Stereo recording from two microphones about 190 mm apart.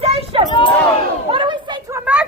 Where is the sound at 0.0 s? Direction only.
30° right (ahead or behind).